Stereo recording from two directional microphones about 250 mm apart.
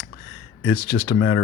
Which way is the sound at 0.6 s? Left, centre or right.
Left.